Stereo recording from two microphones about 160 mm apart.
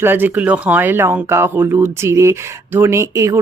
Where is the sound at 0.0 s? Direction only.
10° right (ahead or behind).